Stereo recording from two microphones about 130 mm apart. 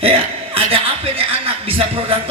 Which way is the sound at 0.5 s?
45° right (ahead or behind).